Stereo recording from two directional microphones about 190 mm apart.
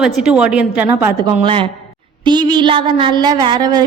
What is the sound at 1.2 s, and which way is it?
A woman's voice, 25° right (ahead or behind).